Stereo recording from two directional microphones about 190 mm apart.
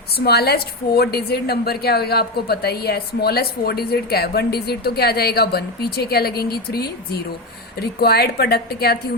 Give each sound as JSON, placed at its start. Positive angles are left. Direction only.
{"t": 0.3, "sound": "a woman's voice", "side_deg": 55}